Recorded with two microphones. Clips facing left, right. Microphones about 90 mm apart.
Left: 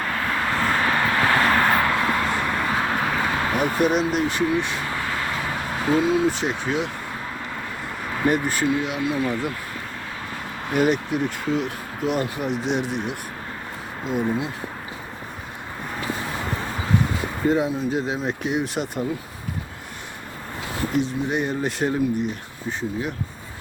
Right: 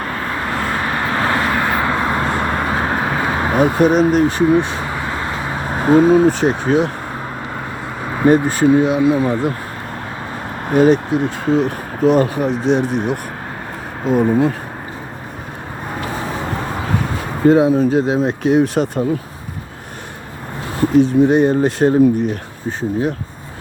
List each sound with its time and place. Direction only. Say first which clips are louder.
0.1 s vehicle: right 2 dB; 15° right (ahead or behind)
1.8 s a sound: right 4 dB; 25° right (ahead or behind)
4.9 s a sound: right 4 dB; 20° right (ahead or behind); by 6.9 s 40° right (ahead or behind)
8.2 s speech: right 9 dB; 30° right (ahead or behind)
10.7 s speech: right 8 dB; 35° right (ahead or behind)
17.4 s speech: right 10 dB; 65° right (ahead or behind)
18.0 s speech: right 9 dB; 30° right (ahead or behind)
20.9 s speech: right 13 dB; 40° right (ahead or behind)